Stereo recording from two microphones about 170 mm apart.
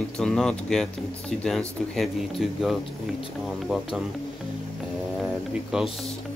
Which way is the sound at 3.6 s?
Centre (ahead or behind).